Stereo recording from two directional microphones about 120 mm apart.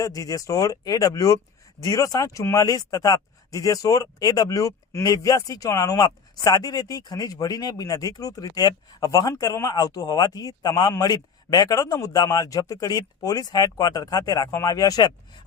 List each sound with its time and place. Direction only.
0.0 s speech: 30° left (ahead or behind)